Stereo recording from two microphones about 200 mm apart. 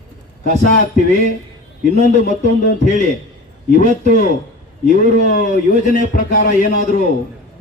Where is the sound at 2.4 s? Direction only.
40° left (ahead or behind).